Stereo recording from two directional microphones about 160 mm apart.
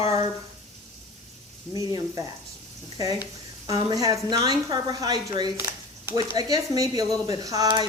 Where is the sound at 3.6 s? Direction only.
20° right (ahead or behind).